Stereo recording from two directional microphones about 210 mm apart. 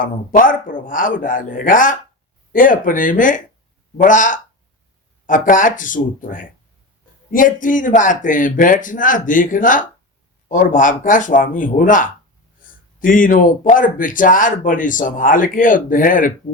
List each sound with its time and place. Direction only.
0.0 s speech: 40° left (ahead or behind)